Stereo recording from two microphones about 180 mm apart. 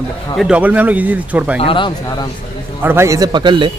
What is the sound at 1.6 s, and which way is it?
Speech, 30° left (ahead or behind).